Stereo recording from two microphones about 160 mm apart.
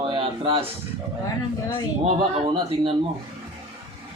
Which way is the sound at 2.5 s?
35° right (ahead or behind).